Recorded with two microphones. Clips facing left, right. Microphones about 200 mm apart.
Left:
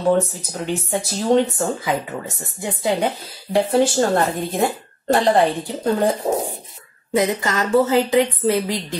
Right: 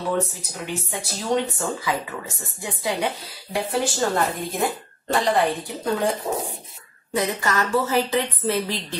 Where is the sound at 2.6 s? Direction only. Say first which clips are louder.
Left 5 dB; 25° left (ahead or behind).